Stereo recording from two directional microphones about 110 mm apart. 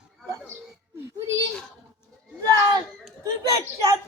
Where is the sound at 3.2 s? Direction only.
30° right (ahead or behind).